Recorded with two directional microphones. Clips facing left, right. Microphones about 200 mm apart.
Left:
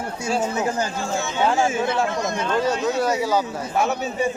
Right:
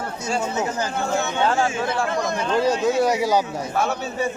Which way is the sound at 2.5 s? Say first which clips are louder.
Right 3 dB; 10° right (ahead or behind).